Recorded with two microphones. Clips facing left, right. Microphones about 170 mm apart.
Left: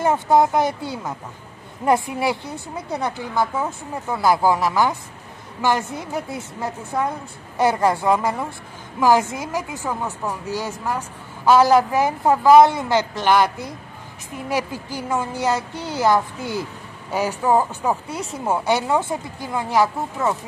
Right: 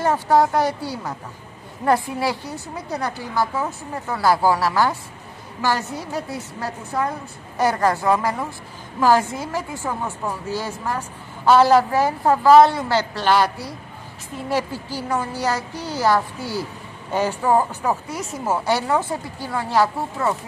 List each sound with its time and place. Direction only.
0.0 s a woman's voice: 20° left (ahead or behind)
17.1 s a woman's voice: 10° left (ahead or behind)
18.0 s a woman's voice: 30° left (ahead or behind)